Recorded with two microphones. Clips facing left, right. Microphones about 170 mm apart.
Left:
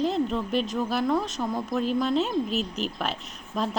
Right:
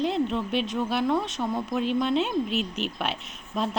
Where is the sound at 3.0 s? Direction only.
Centre (ahead or behind).